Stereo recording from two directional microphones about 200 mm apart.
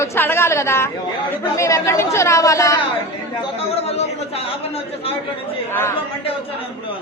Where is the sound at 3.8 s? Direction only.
30° left (ahead or behind).